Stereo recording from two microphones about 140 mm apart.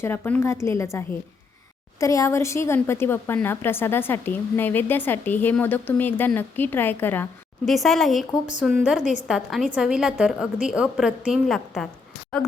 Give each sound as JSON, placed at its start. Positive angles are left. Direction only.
{"t": 0.0, "sound": "a woman's voice", "side_deg": 15}
{"t": 7.6, "sound": "a woman's voice", "side_deg": 0}